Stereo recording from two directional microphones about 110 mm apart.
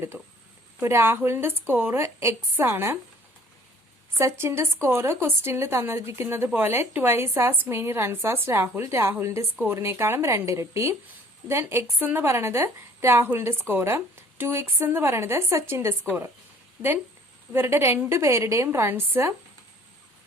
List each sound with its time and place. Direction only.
0.1 s a sound: 15° right (ahead or behind)
0.8 s a woman's voice: 25° right (ahead or behind)
4.2 s a woman's voice: 25° right (ahead or behind)
17.5 s a woman's voice: 20° right (ahead or behind)